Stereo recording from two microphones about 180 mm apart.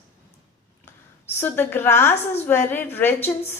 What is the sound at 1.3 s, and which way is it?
A woman's voice, 10° left (ahead or behind).